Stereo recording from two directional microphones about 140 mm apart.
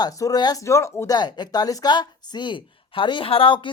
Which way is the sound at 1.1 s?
30° left (ahead or behind).